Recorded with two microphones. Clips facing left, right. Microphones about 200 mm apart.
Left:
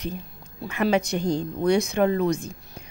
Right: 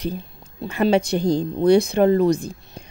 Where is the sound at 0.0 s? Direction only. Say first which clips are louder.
Right 5 dB; 30° right (ahead or behind).